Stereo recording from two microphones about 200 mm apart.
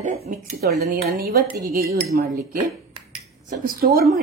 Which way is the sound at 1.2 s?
50° right (ahead or behind).